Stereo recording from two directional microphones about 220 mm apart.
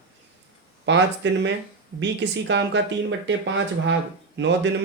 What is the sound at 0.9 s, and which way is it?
Speech, 55° right (ahead or behind).